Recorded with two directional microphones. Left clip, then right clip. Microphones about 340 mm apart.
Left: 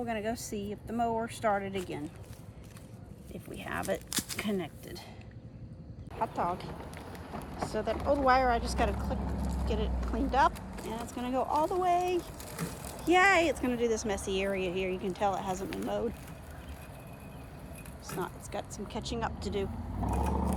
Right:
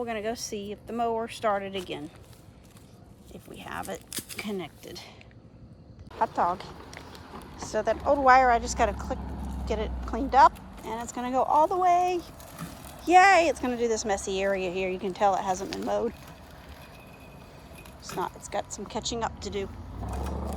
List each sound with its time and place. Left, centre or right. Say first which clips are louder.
0.0 s speech: right 3 dB; centre
3.5 s speech: left 2 dB; centre
4.1 s a sound: left 3 dB; centre
4.4 s speech: even; centre
6.1 s speech: right 6 dB; centre
18.0 s speech: right 6 dB; centre